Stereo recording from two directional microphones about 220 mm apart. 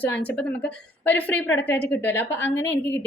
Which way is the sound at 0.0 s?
5° left (ahead or behind).